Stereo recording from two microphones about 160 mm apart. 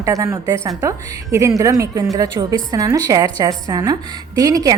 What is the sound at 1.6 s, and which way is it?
A woman's voice, 20° right (ahead or behind).